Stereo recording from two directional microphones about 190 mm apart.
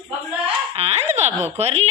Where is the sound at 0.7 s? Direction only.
35° right (ahead or behind).